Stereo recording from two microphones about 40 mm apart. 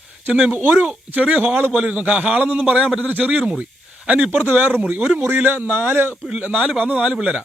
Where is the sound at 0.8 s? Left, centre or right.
Right.